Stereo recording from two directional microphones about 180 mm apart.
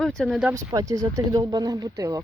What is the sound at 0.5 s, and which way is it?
Speech, 20° right (ahead or behind).